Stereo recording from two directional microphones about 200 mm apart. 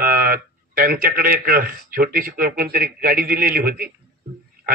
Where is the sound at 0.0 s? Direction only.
45° right (ahead or behind).